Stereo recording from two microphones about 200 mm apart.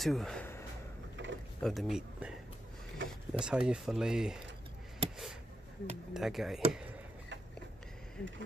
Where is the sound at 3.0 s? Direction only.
65° right (ahead or behind).